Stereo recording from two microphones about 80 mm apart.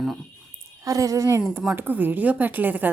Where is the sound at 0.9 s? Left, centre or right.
Right.